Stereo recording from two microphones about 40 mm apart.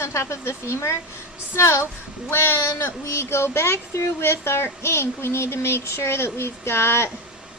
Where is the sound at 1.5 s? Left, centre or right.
Left.